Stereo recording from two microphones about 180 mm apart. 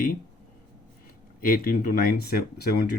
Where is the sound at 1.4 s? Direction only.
55° left (ahead or behind).